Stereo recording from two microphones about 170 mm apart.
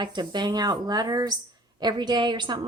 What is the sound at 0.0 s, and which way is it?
Speech, 25° right (ahead or behind).